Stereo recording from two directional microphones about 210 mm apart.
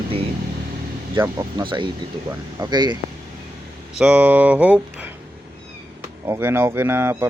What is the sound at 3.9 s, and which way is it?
Speech, 5° right (ahead or behind).